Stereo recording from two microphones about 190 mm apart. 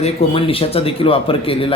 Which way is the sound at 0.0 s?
30° left (ahead or behind).